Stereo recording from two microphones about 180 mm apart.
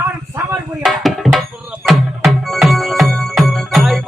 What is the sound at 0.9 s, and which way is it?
Music, centre (ahead or behind).